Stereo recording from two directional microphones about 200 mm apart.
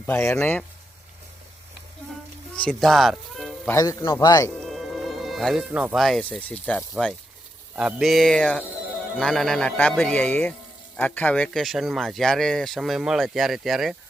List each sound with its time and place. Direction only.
0.0 s a man's voice: 10° left (ahead or behind)
2.6 s speech: 5° left (ahead or behind)
3.7 s a man's voice: 15° left (ahead or behind)
4.5 s speech: centre (ahead or behind)